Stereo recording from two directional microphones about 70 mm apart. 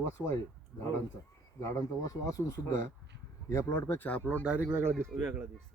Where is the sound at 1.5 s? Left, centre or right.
Left.